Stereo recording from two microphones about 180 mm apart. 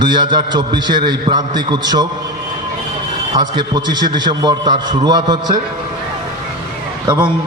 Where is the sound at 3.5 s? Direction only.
25° right (ahead or behind).